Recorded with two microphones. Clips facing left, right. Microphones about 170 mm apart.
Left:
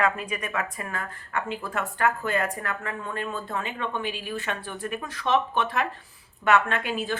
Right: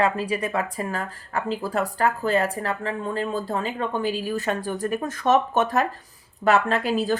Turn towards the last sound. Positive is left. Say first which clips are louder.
# right 6 dB
turn(degrees=-35)  # may be behind; listen again after turning